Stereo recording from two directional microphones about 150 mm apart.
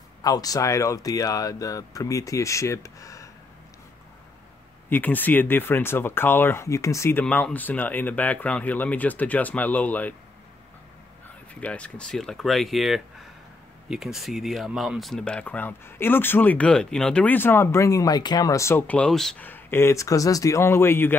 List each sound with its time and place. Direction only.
0.2 s speech: 25° left (ahead or behind)
4.8 s speech: 10° left (ahead or behind)
11.6 s speech: 10° left (ahead or behind)